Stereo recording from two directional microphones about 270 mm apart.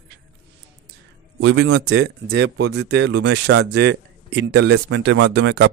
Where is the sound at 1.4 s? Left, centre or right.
Right.